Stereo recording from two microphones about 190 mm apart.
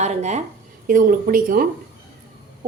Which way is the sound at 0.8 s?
45° right (ahead or behind).